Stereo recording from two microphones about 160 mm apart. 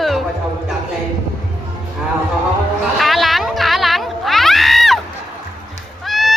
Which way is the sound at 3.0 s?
Centre (ahead or behind).